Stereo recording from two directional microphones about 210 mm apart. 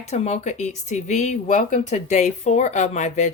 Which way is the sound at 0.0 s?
30° left (ahead or behind).